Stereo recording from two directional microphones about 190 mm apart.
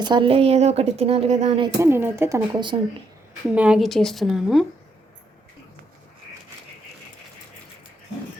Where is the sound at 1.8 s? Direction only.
10° right (ahead or behind).